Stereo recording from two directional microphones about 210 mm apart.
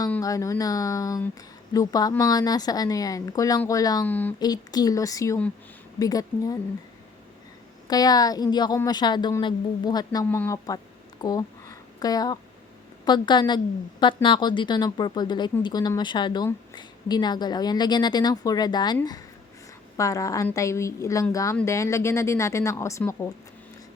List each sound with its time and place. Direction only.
0.1 s speech: 15° left (ahead or behind)
4.4 s speech: 20° left (ahead or behind)
7.9 s a woman's voice: 20° left (ahead or behind)
11.2 s a sound: 15° left (ahead or behind)
13.1 s a woman's voice: 20° left (ahead or behind)